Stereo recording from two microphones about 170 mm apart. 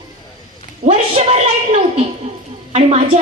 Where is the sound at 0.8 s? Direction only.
40° right (ahead or behind).